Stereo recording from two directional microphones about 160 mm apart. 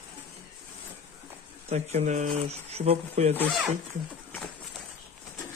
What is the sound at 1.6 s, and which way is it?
Speech, 45° right (ahead or behind).